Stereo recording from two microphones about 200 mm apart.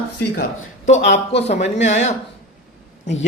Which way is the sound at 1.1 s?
30° left (ahead or behind).